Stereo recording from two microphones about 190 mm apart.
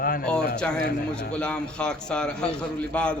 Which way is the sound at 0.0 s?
50° left (ahead or behind).